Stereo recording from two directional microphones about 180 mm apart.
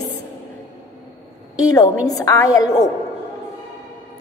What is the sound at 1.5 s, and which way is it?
A woman's voice, 20° left (ahead or behind).